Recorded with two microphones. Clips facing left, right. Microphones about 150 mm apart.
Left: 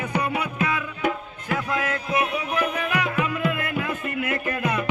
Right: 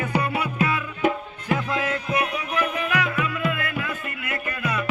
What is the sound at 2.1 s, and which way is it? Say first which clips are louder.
Music: left 2 dB; 25° left (ahead or behind).